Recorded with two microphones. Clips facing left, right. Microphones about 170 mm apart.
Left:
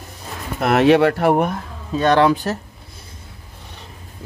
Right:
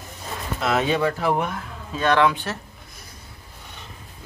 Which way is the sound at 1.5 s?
35° left (ahead or behind).